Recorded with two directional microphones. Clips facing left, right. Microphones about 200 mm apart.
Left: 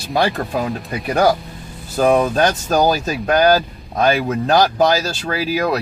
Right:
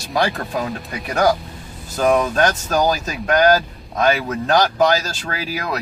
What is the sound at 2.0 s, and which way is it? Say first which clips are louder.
Speech: left 2 dB; 30° left (ahead or behind).